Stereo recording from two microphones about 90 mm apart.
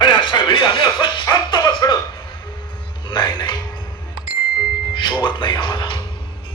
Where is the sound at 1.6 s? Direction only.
55° left (ahead or behind).